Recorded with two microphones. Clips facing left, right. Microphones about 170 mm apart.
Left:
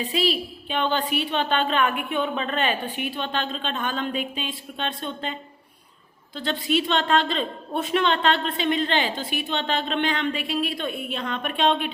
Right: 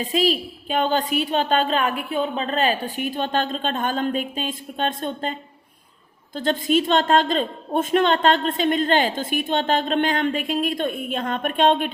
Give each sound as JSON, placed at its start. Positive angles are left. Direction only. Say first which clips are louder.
{"t": 0.0, "sound": "a woman's voice", "louder": "right 3 dB", "side_deg": -45}